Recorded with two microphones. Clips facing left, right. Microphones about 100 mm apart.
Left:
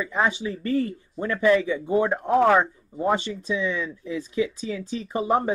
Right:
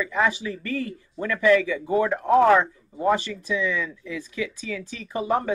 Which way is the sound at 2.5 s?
10° left (ahead or behind).